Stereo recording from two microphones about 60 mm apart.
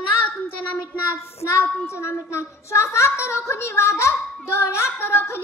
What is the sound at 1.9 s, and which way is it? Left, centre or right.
A woman's voice, left.